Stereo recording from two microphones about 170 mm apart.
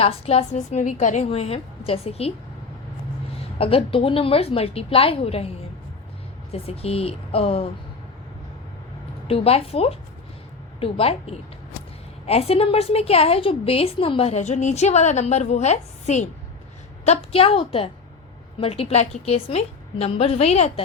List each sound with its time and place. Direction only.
0.0 s a woman's voice: 35° left (ahead or behind)
3.6 s a woman's voice: 35° left (ahead or behind)
6.5 s a woman's voice: 35° left (ahead or behind)
9.2 s a woman's voice: 35° left (ahead or behind)